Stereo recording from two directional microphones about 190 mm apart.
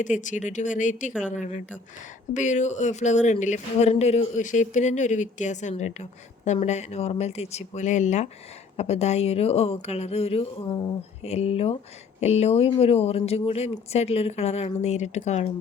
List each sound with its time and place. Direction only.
0.0 s speech: 40° left (ahead or behind)